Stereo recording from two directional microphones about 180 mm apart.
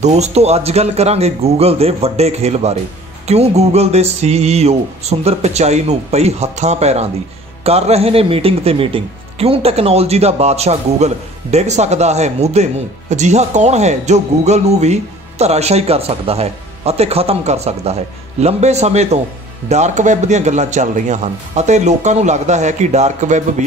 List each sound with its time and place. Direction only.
0.0 s a man's voice: 40° right (ahead or behind)